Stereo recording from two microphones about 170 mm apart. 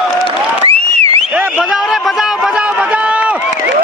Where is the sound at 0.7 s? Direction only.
40° right (ahead or behind).